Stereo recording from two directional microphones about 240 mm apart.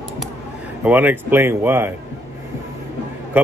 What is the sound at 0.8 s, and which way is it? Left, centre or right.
Speech, centre.